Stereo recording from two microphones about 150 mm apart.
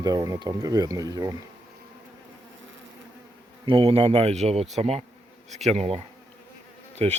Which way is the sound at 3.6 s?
35° right (ahead or behind).